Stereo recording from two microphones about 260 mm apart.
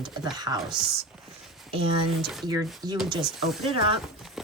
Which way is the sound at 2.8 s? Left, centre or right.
Centre.